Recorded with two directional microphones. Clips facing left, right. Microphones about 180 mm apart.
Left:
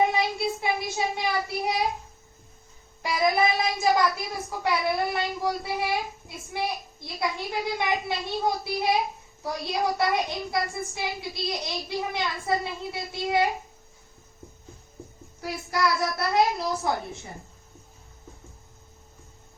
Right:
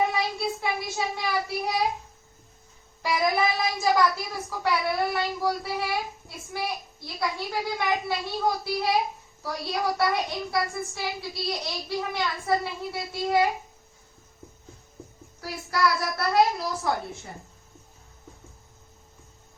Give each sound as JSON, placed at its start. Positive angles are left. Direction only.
{"t": 0.1, "sound": "child singing", "side_deg": 20}
{"t": 0.9, "sound": "a woman's voice", "side_deg": 20}
{"t": 3.0, "sound": "a woman's voice", "side_deg": 20}
{"t": 15.4, "sound": "a woman's voice", "side_deg": 20}